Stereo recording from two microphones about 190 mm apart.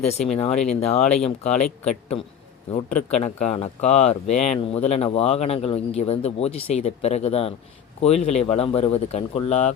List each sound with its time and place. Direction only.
0.1 s speech: 35° left (ahead or behind)